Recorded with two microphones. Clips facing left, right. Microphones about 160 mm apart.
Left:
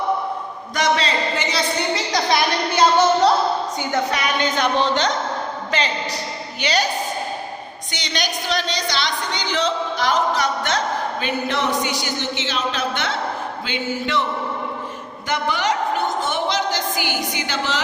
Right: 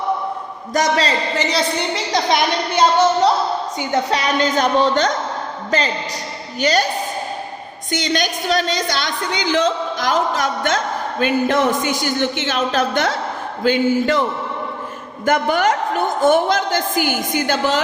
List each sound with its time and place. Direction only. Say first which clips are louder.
0.7 s speech: right 3 dB; 40° right (ahead or behind)
2.1 s a woman's voice: right 3 dB; 25° right (ahead or behind)
4.1 s speech: right 4 dB; 35° right (ahead or behind)
6.6 s a woman's voice: right 5 dB; 45° right (ahead or behind)
7.9 s a woman's voice: right 7 dB; 50° right (ahead or behind)
15.3 s a woman's voice: right 5 dB; 50° right (ahead or behind)